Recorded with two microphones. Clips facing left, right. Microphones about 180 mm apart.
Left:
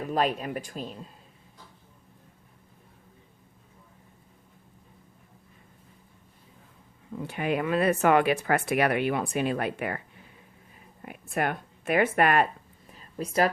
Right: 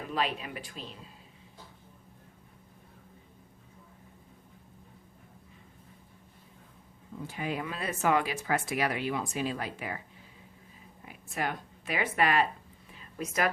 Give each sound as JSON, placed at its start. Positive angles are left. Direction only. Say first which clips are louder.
{"t": 0.1, "sound": "speech", "louder": "left 6 dB", "side_deg": 45}
{"t": 7.2, "sound": "speech", "louder": "left 6 dB", "side_deg": 65}
{"t": 12.9, "sound": "a sound", "louder": "left 4 dB", "side_deg": 35}